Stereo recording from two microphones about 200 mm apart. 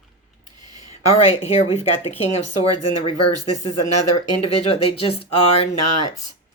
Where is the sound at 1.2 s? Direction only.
30° left (ahead or behind).